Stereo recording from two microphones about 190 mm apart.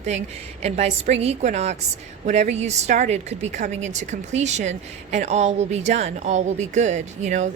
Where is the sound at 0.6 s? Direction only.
35° right (ahead or behind).